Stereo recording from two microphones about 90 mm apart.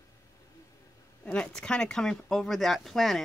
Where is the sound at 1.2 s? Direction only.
15° left (ahead or behind).